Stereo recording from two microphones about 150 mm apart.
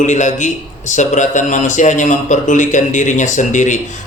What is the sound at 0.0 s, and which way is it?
A man's voice, 55° left (ahead or behind).